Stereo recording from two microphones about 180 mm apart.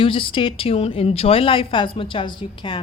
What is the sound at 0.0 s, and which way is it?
A woman's voice, 30° left (ahead or behind).